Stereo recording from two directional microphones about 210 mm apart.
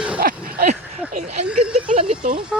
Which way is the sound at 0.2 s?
40° right (ahead or behind).